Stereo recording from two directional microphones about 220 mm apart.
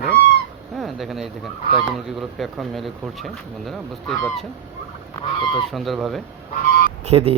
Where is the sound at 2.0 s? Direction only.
Centre (ahead or behind).